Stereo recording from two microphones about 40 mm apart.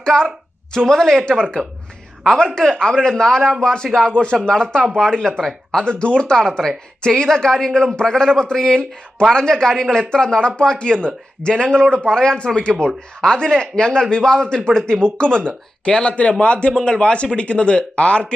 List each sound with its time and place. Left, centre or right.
0.0 s a woman's voice: centre